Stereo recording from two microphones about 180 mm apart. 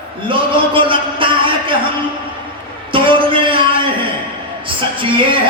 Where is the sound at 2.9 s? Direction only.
30° right (ahead or behind).